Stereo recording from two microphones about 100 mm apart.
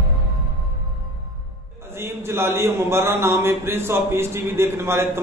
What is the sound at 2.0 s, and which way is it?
Speech, 25° right (ahead or behind).